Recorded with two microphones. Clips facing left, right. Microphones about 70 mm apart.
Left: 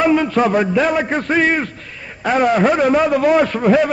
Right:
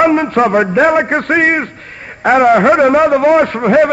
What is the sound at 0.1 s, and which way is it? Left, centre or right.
A man's voice, right.